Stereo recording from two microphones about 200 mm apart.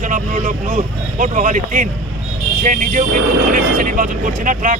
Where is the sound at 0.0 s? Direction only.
40° right (ahead or behind).